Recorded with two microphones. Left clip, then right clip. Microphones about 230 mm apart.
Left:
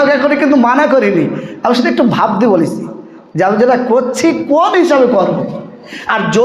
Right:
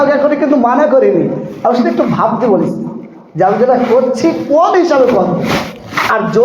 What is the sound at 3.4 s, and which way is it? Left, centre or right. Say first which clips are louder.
A man's voice: right 1 dB; left.